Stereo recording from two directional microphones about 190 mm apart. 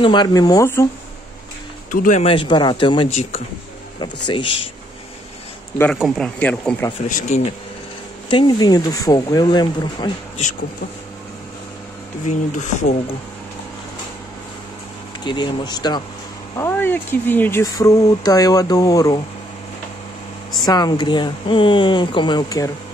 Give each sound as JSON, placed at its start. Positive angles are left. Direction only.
{"t": 0.0, "sound": "speech", "side_deg": 25}
{"t": 1.9, "sound": "speech", "side_deg": 40}
{"t": 4.0, "sound": "speech", "side_deg": 25}
{"t": 5.9, "sound": "speech", "side_deg": 0}
{"t": 7.1, "sound": "speech", "side_deg": 40}
{"t": 8.3, "sound": "speech", "side_deg": 25}
{"t": 12.3, "sound": "speech", "side_deg": 40}
{"t": 15.2, "sound": "speech", "side_deg": 25}
{"t": 16.5, "sound": "speech", "side_deg": 10}
{"t": 20.6, "sound": "speech", "side_deg": 20}